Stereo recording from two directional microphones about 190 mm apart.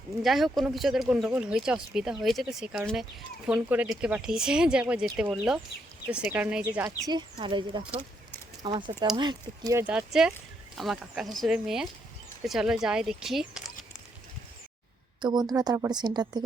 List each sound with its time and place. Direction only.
0.2 s speech: centre (ahead or behind)
7.1 s a woman's voice: 25° right (ahead or behind)
9.8 s speech: 5° right (ahead or behind)
15.2 s a woman's voice: 20° right (ahead or behind)